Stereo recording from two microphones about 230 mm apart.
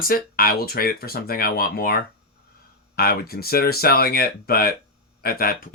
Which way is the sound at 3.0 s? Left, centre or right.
Left.